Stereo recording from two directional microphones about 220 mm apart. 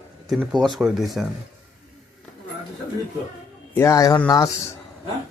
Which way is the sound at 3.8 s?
15° left (ahead or behind).